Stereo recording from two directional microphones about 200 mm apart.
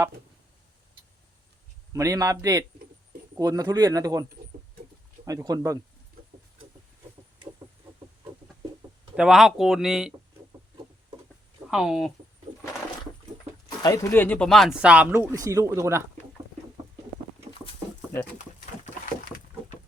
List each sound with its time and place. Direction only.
1.9 s speech: 15° right (ahead or behind)
9.1 s speech: centre (ahead or behind)
11.7 s speech: centre (ahead or behind)
13.8 s speech: 15° left (ahead or behind); by 16.0 s 15° right (ahead or behind)